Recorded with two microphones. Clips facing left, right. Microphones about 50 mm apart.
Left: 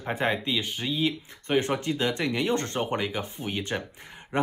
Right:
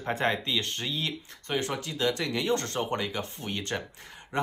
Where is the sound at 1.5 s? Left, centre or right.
Left.